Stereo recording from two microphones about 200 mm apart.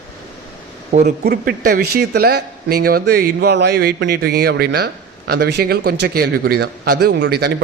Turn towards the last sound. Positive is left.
turn(degrees=-55)  # may be behind; listen again after turning